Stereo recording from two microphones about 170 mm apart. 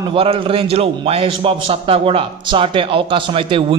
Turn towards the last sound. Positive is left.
turn(degrees=-30)  # may be behind; listen again after turning